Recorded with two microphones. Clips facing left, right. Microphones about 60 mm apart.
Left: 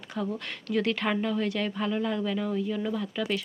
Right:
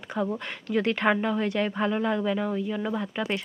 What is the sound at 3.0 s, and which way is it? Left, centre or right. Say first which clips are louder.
Speech: right 1 dB; right.